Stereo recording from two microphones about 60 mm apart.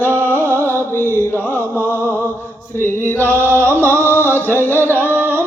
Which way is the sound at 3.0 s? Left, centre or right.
Left.